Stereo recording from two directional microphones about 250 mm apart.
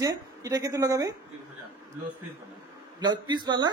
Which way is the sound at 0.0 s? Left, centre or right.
Centre.